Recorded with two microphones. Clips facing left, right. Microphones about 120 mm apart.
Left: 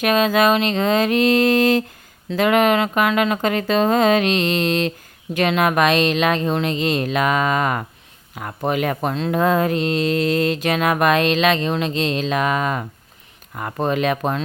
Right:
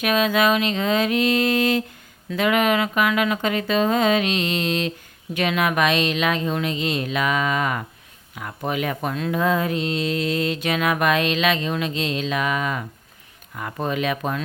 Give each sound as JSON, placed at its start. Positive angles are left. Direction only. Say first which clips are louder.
{"t": 0.0, "sound": "speech", "louder": "left 3 dB", "side_deg": 40}
{"t": 2.3, "sound": "mantra", "louder": "left 4 dB", "side_deg": 40}
{"t": 5.3, "sound": "speech", "louder": "left 4 dB", "side_deg": 40}
{"t": 8.4, "sound": "mantra", "louder": "left 4 dB", "side_deg": 45}
{"t": 9.0, "sound": "speech", "louder": "left 3 dB", "side_deg": 30}
{"t": 9.3, "sound": "mantra", "louder": "left 4 dB", "side_deg": 50}
{"t": 13.5, "sound": "speech", "louder": "left 4 dB", "side_deg": 40}